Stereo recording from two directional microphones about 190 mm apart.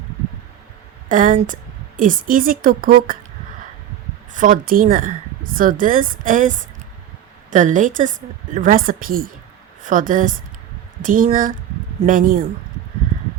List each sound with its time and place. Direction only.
1.0 s speech: 45° right (ahead or behind)
4.3 s a woman's voice: 45° right (ahead or behind)